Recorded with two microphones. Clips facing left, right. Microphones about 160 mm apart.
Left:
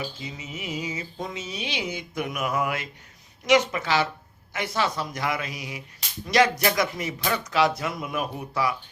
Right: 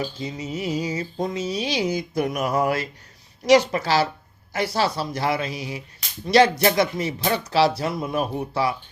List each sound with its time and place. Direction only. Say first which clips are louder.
0.0 s speech: right 6 dB; 40° right (ahead or behind)